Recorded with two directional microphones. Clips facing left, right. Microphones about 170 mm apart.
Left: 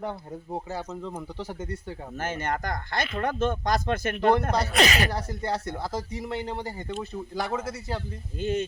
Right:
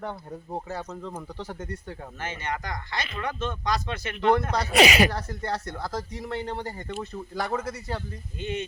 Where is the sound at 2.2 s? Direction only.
45° left (ahead or behind).